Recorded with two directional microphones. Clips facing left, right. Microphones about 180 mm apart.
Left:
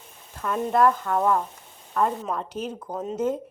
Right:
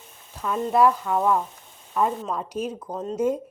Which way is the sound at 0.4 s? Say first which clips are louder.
Right 1 dB; 5° right (ahead or behind).